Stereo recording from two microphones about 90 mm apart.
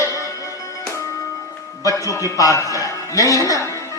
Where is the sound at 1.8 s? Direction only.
40° left (ahead or behind).